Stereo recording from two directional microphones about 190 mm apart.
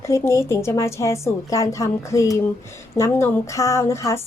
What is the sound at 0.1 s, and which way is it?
A woman's voice, 15° left (ahead or behind).